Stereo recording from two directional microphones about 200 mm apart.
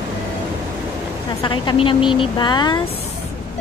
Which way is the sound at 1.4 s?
25° left (ahead or behind).